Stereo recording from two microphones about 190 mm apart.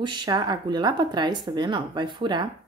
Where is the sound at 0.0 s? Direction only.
25° right (ahead or behind).